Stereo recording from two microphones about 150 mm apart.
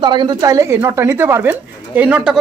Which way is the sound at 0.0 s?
30° right (ahead or behind).